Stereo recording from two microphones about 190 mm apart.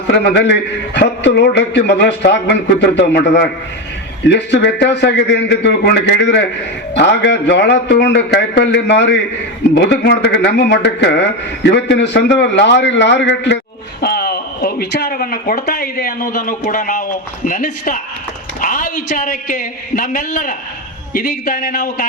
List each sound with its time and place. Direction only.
0.1 s speech: 60° left (ahead or behind)
14.0 s speech: 55° left (ahead or behind)